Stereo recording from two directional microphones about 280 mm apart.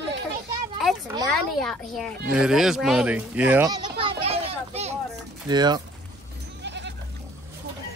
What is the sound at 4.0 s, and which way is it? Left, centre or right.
Children playing, right.